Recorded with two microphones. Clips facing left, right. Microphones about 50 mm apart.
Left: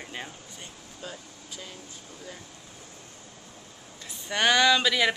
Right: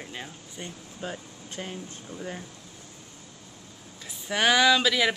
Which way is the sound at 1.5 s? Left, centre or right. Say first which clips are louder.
Right 6 dB; right.